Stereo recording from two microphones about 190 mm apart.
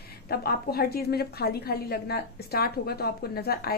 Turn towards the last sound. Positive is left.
turn(degrees=55)  # may be behind; listen again after turning